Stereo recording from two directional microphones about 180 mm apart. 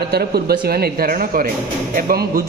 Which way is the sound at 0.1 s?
60° right (ahead or behind).